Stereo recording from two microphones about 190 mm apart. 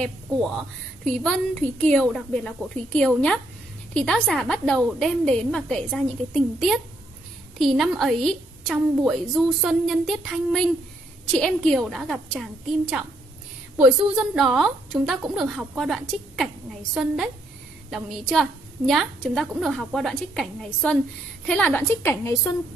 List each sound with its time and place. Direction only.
1.2 s a woman's voice: 5° left (ahead or behind)
14.1 s a woman's voice: 5° right (ahead or behind); by 22.6 s 15° left (ahead or behind)